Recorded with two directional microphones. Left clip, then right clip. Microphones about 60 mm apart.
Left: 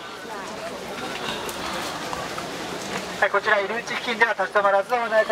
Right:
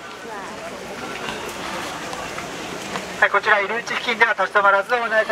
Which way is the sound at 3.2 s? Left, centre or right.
Right.